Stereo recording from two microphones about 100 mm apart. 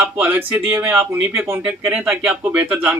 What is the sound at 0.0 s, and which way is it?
Speech, 20° right (ahead or behind).